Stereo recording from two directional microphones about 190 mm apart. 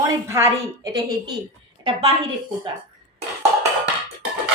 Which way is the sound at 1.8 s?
30° right (ahead or behind).